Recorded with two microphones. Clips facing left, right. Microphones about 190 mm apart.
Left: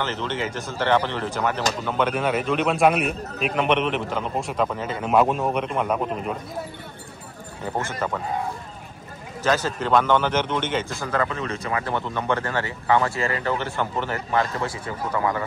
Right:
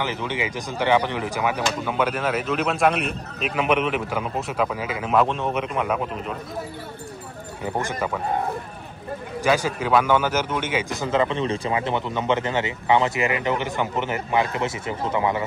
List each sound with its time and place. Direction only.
0.0 s a man's voice: 10° right (ahead or behind)
7.6 s speech: 10° right (ahead or behind)
9.4 s speech: 10° right (ahead or behind)
11.0 s speech: 20° right (ahead or behind)